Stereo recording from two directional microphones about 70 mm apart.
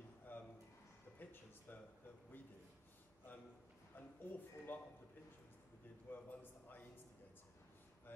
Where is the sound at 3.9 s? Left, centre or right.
Left.